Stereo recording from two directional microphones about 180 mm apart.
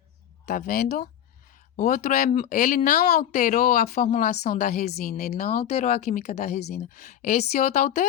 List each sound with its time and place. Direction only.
0.4 s speech: 50° left (ahead or behind)
4.1 s a woman's voice: 35° left (ahead or behind); by 5.6 s 50° left (ahead or behind)
5.6 s a woman's voice: 35° left (ahead or behind)